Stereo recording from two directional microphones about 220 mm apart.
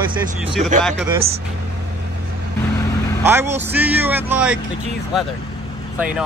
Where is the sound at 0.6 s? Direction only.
30° right (ahead or behind).